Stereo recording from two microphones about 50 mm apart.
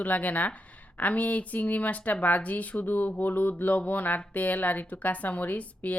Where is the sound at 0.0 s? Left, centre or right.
Left.